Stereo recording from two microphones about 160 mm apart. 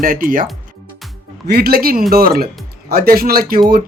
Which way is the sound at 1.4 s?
75° right (ahead or behind).